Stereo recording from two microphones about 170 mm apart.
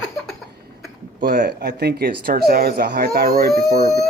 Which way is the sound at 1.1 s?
55° right (ahead or behind).